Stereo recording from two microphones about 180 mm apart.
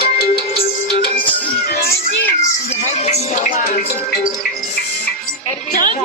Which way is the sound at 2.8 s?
40° left (ahead or behind).